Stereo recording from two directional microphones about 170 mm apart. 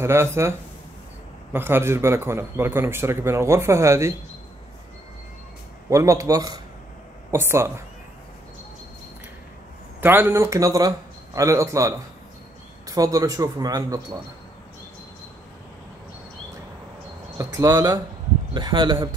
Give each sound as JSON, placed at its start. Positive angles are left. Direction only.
{"t": 0.0, "sound": "a man's voice", "side_deg": -15}
{"t": 5.9, "sound": "speech", "side_deg": -20}
{"t": 9.9, "sound": "a man's voice", "side_deg": -10}
{"t": 17.4, "sound": "speech", "side_deg": -20}